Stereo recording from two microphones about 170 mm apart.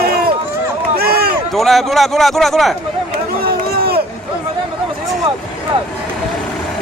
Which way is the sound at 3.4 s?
65° right (ahead or behind).